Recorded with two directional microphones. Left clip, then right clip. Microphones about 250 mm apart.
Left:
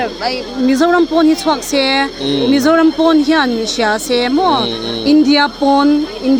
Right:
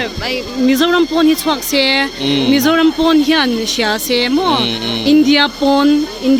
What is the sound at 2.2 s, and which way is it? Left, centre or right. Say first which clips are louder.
Speech: even; right.